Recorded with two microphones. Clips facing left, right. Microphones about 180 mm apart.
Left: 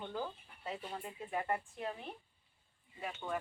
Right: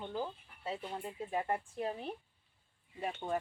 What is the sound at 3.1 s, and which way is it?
Speech, 30° right (ahead or behind).